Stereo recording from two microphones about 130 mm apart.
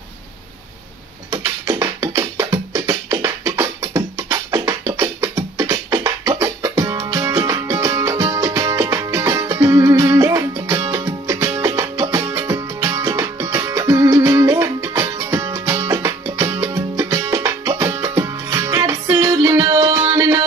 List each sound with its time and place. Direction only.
1.3 s music: 25° right (ahead or behind)